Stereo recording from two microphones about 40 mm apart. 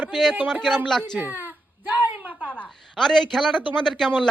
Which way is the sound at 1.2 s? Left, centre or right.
Right.